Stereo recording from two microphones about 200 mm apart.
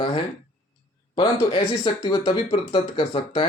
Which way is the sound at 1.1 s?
25° left (ahead or behind).